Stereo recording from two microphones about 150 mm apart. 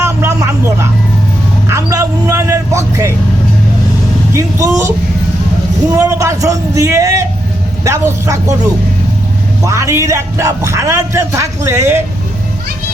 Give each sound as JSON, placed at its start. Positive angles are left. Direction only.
{"t": 0.0, "sound": "a sound", "side_deg": -20}
{"t": 1.7, "sound": "vehicle", "side_deg": -20}
{"t": 4.4, "sound": "a man's voice", "side_deg": -20}
{"t": 9.6, "sound": "a man's voice", "side_deg": -20}